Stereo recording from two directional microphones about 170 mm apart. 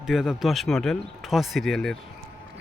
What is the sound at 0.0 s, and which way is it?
A man's voice, centre (ahead or behind).